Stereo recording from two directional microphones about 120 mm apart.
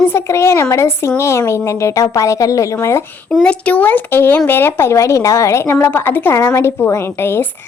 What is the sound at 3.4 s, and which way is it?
Speech, 10° left (ahead or behind).